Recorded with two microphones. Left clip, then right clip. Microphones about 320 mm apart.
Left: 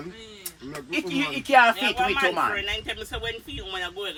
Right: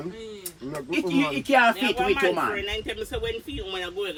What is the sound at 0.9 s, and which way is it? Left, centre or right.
Speech, centre.